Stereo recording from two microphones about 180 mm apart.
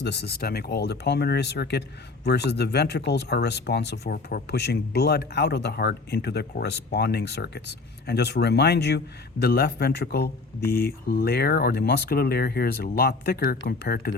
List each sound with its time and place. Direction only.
0.0 s speech: 70° left (ahead or behind)